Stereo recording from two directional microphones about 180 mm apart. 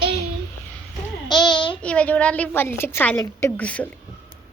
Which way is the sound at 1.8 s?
5° left (ahead or behind).